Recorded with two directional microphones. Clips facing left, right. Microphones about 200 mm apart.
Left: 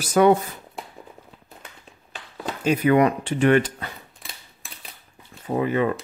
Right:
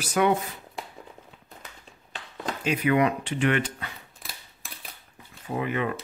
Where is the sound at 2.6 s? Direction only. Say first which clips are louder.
Left 5 dB; 40° left (ahead or behind).